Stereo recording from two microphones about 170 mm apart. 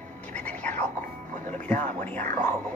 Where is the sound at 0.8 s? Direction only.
45° right (ahead or behind).